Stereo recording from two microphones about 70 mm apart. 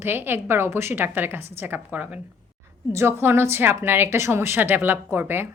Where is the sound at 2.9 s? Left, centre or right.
Right.